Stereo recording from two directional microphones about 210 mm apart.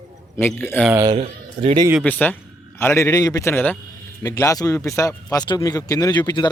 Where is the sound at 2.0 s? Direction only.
10° left (ahead or behind).